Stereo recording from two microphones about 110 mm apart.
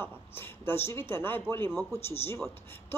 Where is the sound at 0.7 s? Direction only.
20° left (ahead or behind).